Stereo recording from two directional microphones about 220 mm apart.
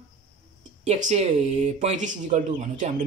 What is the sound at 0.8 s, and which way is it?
Speech, 30° right (ahead or behind).